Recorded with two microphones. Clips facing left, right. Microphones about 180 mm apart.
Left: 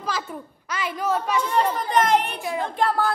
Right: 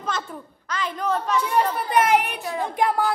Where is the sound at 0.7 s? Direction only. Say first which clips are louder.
Even; 10° left (ahead or behind).